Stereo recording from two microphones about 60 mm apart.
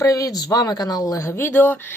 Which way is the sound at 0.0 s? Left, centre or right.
Left.